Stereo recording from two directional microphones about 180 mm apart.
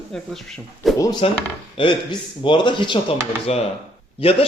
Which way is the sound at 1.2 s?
30° left (ahead or behind).